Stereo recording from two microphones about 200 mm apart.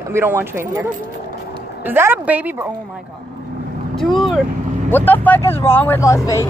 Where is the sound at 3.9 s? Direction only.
Centre (ahead or behind).